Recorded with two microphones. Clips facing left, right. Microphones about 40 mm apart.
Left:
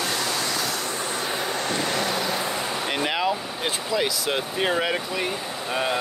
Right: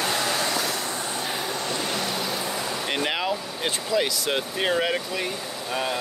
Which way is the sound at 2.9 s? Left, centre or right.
Centre.